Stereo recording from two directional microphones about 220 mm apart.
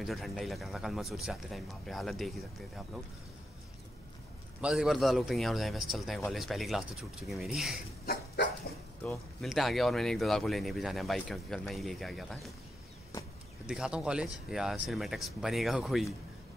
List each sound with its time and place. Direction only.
0.0 s a man's voice: centre (ahead or behind)
4.6 s a man's voice: 5° right (ahead or behind)
8.0 s dog: 45° left (ahead or behind)
9.4 s a man's voice: centre (ahead or behind)
13.7 s a man's voice: 5° right (ahead or behind)